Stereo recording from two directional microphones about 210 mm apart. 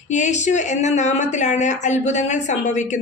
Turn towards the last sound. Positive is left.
turn(degrees=35)  # may be behind; listen again after turning